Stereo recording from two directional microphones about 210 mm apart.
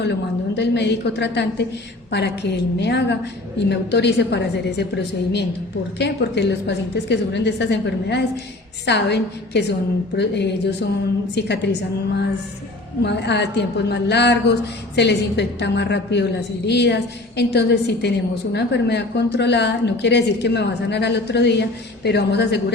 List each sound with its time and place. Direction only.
0.0 s a woman's voice: 55° left (ahead or behind)
13.0 s a woman's voice: 55° left (ahead or behind)